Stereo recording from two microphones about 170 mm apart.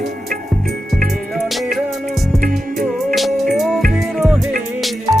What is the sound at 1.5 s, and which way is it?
Music, centre (ahead or behind).